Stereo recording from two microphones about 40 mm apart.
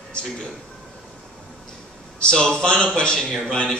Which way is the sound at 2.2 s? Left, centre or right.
Centre.